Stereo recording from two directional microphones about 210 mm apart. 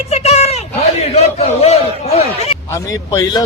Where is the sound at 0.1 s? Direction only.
30° left (ahead or behind).